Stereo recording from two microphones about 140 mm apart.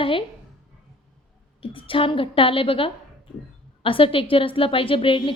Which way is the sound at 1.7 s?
40° left (ahead or behind).